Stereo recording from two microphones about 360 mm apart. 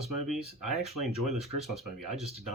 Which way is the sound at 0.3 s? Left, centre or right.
Centre.